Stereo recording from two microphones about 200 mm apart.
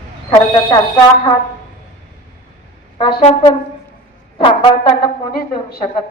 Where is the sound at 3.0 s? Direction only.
25° left (ahead or behind).